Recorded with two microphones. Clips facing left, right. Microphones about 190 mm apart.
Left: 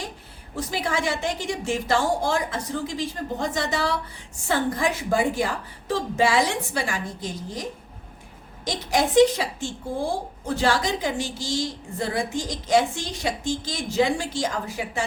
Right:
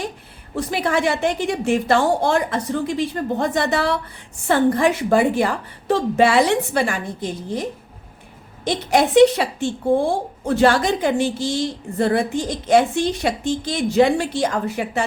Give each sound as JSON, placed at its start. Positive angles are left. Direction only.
{"t": 0.5, "sound": "speech", "side_deg": -60}